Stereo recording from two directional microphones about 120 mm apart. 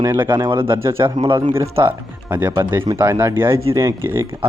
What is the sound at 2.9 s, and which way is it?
Speech, 20° right (ahead or behind).